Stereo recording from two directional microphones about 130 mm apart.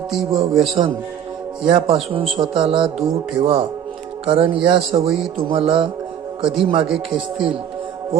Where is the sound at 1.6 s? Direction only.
45° right (ahead or behind).